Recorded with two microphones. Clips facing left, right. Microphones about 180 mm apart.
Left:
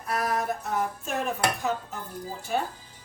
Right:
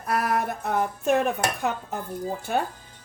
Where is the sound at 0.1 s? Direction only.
60° right (ahead or behind).